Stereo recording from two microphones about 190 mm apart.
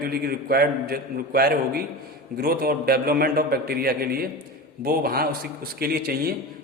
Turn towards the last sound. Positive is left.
turn(degrees=-55)  # may be behind; listen again after turning